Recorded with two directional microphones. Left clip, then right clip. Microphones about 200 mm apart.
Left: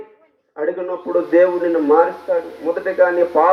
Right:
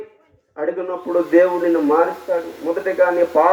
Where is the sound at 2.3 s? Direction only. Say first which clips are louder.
Left 2 dB; 30° left (ahead or behind).